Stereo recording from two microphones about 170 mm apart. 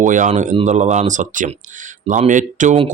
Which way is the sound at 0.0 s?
50° right (ahead or behind).